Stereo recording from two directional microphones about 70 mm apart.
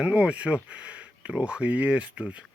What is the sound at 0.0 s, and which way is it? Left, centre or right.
Speech, centre.